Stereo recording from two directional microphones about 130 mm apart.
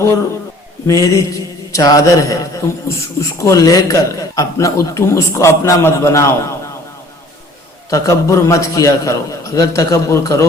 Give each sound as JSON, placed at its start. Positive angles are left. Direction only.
{"t": 0.9, "sound": "a man's voice", "side_deg": 25}
{"t": 7.9, "sound": "a man's voice", "side_deg": 25}